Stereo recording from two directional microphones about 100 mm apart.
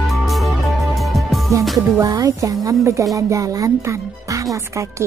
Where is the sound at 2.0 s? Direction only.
35° right (ahead or behind).